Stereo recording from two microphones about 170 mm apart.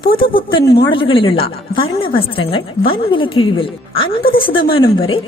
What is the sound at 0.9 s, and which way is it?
Speech, 30° left (ahead or behind).